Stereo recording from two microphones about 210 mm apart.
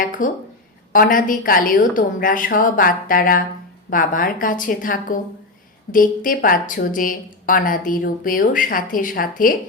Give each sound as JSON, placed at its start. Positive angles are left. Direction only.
{"t": 0.2, "sound": "a woman's voice", "side_deg": 40}